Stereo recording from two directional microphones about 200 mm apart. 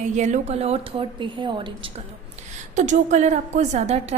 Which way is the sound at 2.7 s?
35° right (ahead or behind).